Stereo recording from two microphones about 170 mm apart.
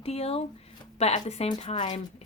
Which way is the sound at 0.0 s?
35° left (ahead or behind).